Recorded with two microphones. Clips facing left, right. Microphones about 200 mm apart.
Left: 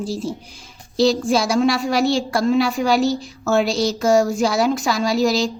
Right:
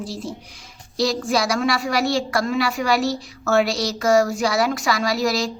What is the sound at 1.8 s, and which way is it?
Speech, centre (ahead or behind).